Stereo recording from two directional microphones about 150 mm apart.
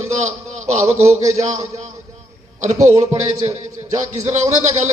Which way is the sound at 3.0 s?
45° right (ahead or behind).